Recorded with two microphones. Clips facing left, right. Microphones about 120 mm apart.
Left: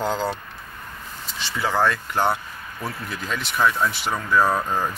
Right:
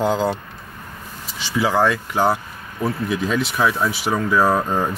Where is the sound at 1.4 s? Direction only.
5° right (ahead or behind).